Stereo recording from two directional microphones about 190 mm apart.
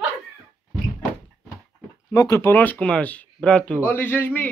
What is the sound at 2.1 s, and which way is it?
A man's voice, 15° left (ahead or behind).